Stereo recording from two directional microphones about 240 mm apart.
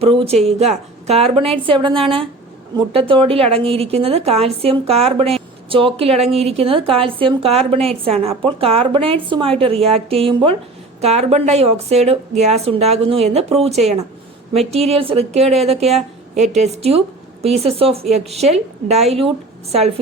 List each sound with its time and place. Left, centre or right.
0.0 s a woman's voice: right